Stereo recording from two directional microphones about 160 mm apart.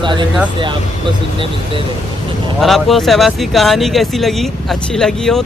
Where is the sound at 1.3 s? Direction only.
30° right (ahead or behind).